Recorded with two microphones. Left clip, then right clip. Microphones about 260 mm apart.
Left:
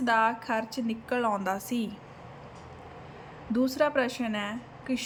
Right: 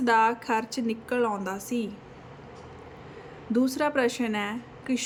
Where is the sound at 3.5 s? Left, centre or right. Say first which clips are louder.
Even; centre.